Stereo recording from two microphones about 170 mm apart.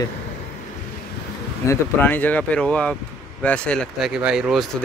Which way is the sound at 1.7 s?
10° left (ahead or behind).